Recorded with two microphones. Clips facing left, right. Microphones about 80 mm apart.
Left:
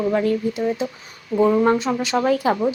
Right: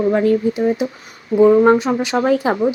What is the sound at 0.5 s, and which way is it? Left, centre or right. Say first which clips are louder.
Speech: right 5 dB; right.